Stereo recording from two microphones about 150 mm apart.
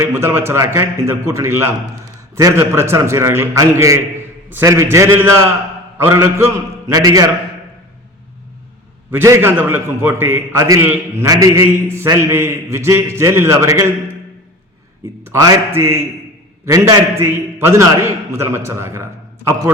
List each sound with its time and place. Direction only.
0.0 s a man's voice: 15° right (ahead or behind)
9.0 s a man's voice: 15° right (ahead or behind)
15.0 s a man's voice: 20° right (ahead or behind)